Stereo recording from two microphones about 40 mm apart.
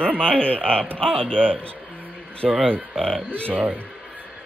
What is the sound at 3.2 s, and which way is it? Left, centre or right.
Speech, right.